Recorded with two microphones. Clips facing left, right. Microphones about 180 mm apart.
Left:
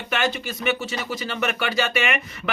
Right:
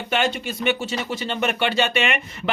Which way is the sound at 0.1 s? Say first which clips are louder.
Right 2 dB; 30° right (ahead or behind).